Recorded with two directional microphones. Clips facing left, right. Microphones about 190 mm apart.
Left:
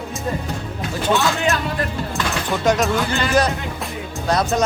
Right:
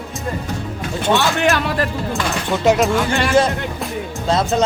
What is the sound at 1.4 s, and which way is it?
Speech, 80° right.